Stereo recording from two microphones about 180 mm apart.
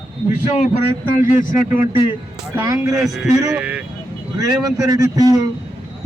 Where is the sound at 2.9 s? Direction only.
Centre (ahead or behind).